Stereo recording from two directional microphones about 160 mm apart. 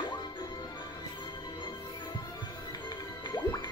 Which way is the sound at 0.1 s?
30° left (ahead or behind).